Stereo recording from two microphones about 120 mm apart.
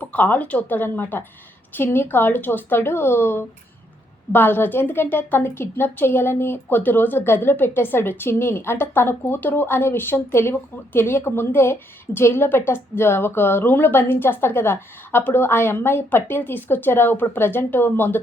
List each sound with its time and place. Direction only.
0.0 s a woman's voice: 15° left (ahead or behind)